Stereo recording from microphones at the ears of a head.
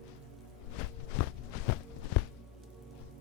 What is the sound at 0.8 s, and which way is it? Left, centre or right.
Walk, left.